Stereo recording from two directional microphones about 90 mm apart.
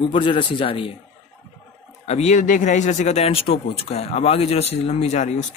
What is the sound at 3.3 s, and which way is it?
Speech, 90° left.